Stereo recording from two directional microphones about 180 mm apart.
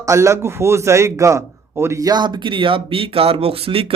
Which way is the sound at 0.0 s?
15° right (ahead or behind).